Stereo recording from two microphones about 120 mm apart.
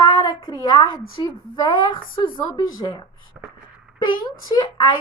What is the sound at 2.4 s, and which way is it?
Speech, 35° left (ahead or behind).